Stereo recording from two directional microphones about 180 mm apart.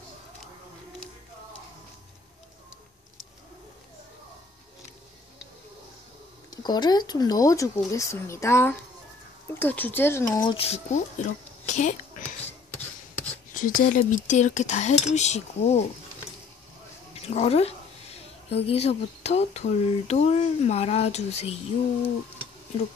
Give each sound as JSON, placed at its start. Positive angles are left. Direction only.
{"t": 6.5, "sound": "speech", "side_deg": 25}
{"t": 13.5, "sound": "speech", "side_deg": 50}
{"t": 17.1, "sound": "a woman's voice", "side_deg": 35}